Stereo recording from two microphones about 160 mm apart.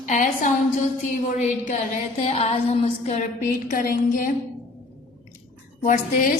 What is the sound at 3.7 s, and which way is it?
Speech, 60° left (ahead or behind).